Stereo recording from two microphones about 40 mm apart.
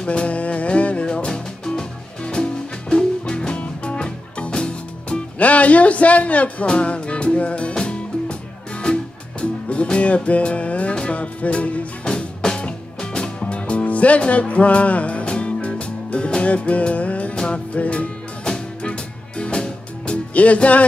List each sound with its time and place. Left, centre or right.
0.0 s music: left
1.0 s music: left
5.4 s a man's voice: left
6.8 s music: left
12.0 s music: centre
20.3 s a man's voice: left